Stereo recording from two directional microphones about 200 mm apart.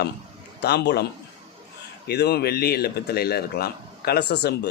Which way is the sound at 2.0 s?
55° left (ahead or behind).